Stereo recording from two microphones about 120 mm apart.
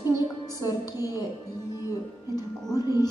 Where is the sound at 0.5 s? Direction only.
30° left (ahead or behind).